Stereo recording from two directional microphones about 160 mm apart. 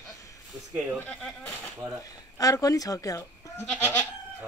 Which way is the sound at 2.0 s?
20° left (ahead or behind).